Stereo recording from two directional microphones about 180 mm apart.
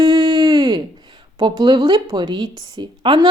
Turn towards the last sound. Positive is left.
turn(degrees=-25)  # may be behind; listen again after turning